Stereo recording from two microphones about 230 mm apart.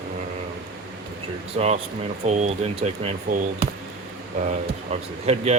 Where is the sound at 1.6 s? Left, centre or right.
Right.